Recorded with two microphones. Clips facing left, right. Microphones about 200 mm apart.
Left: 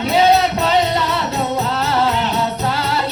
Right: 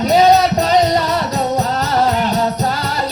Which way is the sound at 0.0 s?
40° right (ahead or behind).